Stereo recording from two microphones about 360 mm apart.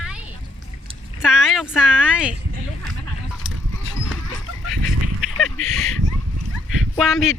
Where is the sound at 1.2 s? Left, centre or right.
Centre.